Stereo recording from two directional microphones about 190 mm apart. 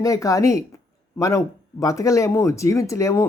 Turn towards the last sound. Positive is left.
turn(degrees=15)  # may be behind; listen again after turning